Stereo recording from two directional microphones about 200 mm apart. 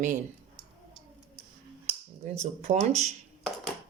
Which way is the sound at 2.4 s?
35° right (ahead or behind).